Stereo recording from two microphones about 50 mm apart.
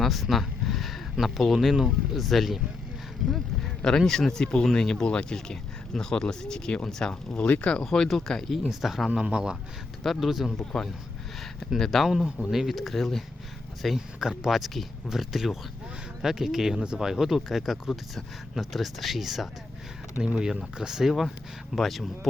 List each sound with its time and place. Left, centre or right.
0.0 s speech: centre; by 7.9 s left
7.9 s speech: centre
8.7 s speech: centre
9.0 s speech: right
10.0 s speech: centre
11.8 s speech: centre
14.2 s speech: centre
17.1 s speech: centre
20.2 s speech: centre